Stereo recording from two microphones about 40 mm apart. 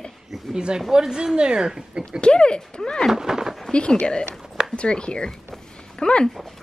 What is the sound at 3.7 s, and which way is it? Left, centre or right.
Speech, left.